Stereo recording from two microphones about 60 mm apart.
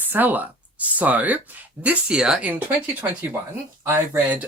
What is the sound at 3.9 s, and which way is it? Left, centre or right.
Speech, right.